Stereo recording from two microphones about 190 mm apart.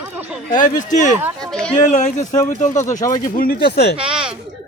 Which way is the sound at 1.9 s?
40° left (ahead or behind).